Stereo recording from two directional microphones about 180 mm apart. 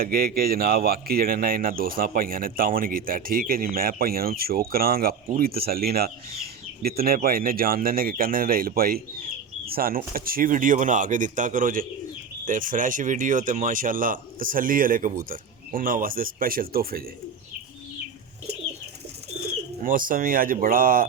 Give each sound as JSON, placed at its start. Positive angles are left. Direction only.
{"t": 0.0, "sound": "speech", "side_deg": -55}
{"t": 19.8, "sound": "speech", "side_deg": -50}